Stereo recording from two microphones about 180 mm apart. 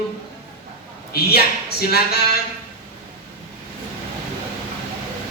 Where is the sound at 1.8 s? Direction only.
60° left (ahead or behind).